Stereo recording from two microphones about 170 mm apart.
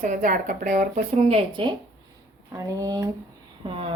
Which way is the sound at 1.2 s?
35° right (ahead or behind).